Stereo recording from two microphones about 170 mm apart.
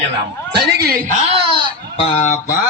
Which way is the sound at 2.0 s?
35° left (ahead or behind).